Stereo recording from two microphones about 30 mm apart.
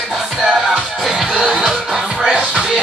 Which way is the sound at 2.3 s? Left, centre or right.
Right.